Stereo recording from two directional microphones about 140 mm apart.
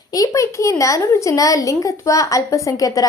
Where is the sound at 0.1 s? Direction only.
25° left (ahead or behind).